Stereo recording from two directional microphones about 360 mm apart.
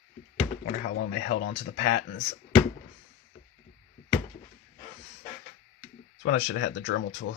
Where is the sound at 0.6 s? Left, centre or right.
Left.